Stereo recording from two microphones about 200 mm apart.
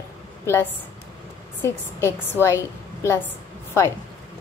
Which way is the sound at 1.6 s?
10° left (ahead or behind).